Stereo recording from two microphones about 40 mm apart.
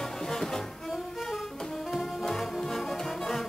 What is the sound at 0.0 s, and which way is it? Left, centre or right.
Music, centre.